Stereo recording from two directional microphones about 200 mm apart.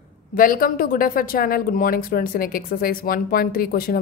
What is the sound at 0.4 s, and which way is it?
Speech, 45° left (ahead or behind).